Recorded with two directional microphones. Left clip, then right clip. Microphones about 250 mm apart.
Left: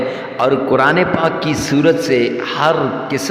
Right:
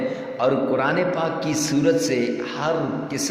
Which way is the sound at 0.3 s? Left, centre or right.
Left.